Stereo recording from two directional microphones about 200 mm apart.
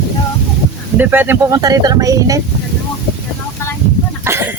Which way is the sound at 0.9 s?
10° right (ahead or behind).